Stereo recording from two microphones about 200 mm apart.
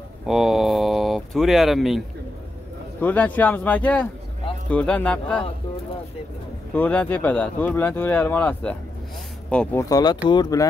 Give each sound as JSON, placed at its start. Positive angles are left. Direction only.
{"t": 0.3, "sound": "a sound", "side_deg": 0}
{"t": 3.0, "sound": "speech", "side_deg": 10}
{"t": 6.7, "sound": "speech", "side_deg": 10}